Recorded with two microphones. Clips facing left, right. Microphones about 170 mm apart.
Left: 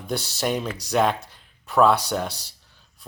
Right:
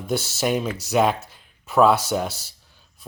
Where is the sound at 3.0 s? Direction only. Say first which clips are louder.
Right 2 dB; centre (ahead or behind).